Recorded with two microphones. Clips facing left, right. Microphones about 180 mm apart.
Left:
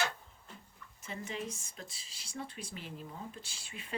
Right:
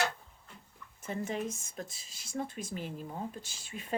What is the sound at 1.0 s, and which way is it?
Speech, 50° right (ahead or behind).